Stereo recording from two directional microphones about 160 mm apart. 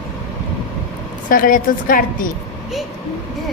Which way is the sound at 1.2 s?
55° left (ahead or behind).